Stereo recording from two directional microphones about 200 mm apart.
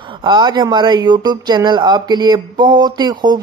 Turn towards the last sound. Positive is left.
turn(degrees=-20)  # may be behind; listen again after turning